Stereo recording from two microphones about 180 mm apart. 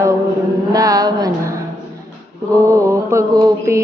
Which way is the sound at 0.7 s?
20° right (ahead or behind).